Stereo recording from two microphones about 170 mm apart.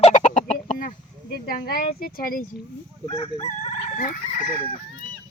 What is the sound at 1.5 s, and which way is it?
Crowing, 60° left (ahead or behind).